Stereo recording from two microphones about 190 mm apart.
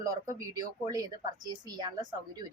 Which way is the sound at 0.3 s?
20° right (ahead or behind).